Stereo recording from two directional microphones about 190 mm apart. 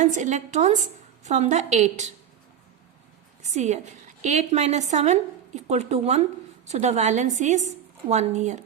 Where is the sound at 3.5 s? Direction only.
35° right (ahead or behind).